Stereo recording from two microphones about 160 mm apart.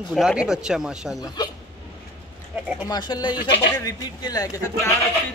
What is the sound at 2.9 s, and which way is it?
Speech, 25° left (ahead or behind).